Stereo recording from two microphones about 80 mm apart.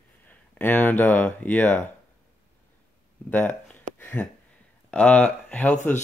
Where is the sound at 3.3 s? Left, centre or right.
Left.